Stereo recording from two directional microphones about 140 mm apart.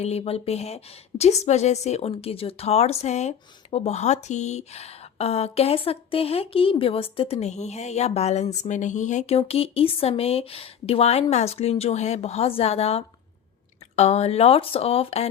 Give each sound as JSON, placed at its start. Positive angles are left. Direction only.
{"t": 0.0, "sound": "speech", "side_deg": 45}